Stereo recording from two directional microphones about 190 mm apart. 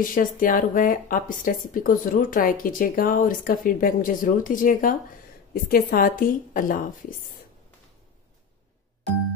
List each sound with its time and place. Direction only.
0.0 s speech: 45° left (ahead or behind)